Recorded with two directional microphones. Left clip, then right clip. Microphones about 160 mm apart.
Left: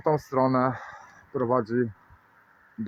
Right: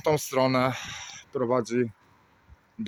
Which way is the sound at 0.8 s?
5° right (ahead or behind).